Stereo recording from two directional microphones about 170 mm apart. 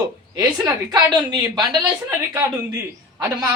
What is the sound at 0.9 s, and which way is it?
Speech, 25° right (ahead or behind).